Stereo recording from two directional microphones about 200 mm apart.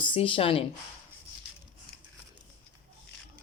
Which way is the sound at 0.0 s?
25° left (ahead or behind).